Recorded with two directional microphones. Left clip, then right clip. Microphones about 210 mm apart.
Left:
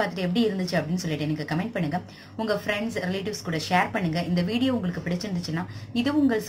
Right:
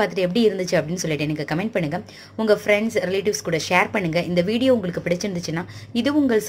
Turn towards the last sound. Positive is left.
turn(degrees=-40)  # may be behind; listen again after turning